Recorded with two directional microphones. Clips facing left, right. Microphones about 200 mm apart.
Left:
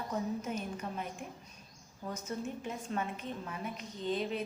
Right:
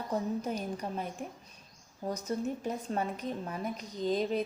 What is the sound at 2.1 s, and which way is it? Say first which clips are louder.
A woman's voice: right 5 dB; 35° right (ahead or behind).